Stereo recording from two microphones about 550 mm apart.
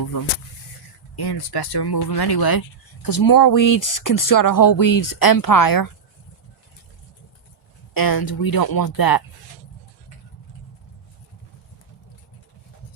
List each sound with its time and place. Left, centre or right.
0.0 s a sound: left
1.1 s speech: left
7.9 s speech: left